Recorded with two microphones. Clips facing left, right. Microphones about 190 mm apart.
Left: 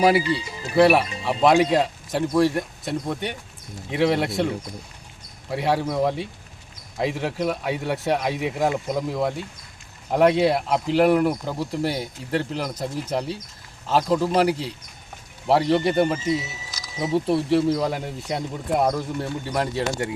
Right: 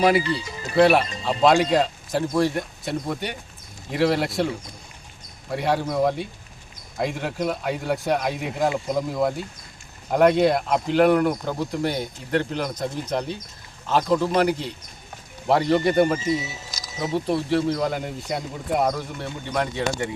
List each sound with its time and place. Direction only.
0.0 s speech: 5° left (ahead or behind)
19.5 s speech: 35° left (ahead or behind)